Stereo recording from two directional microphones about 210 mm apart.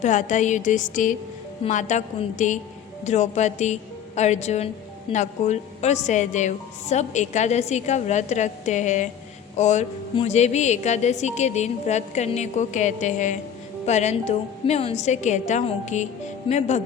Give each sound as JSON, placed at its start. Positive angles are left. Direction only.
{"t": 0.0, "sound": "a woman's voice", "side_deg": 35}